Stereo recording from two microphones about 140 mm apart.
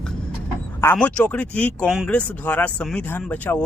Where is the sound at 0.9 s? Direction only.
10° left (ahead or behind).